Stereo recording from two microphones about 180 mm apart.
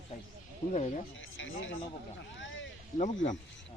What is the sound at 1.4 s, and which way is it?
Speech, 90° left.